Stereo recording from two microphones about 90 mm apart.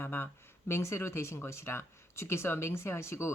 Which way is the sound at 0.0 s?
25° left (ahead or behind).